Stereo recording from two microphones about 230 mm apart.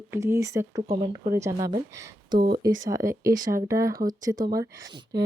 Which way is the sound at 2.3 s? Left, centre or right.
Right.